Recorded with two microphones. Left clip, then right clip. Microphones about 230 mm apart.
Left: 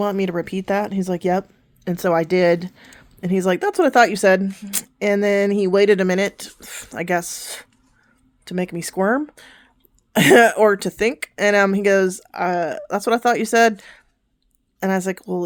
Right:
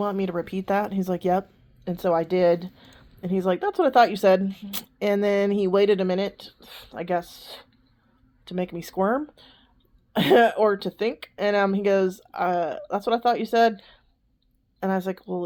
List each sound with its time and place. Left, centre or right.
0.0 s speech: left
1.8 s speech: left
8.4 s speech: left
9.4 s a sound: left
10.1 s speech: left